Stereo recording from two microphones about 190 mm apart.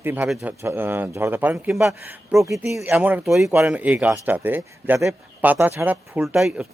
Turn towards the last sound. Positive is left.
turn(degrees=-5)  # may be behind; listen again after turning